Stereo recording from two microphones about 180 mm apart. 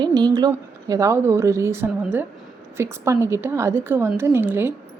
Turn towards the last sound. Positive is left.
turn(degrees=-10)  # may be behind; listen again after turning